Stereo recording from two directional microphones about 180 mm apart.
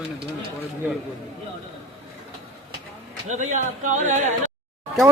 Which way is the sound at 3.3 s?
45° right (ahead or behind).